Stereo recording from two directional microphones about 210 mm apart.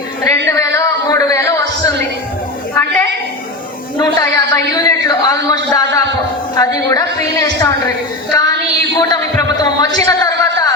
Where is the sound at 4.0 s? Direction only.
15° left (ahead or behind).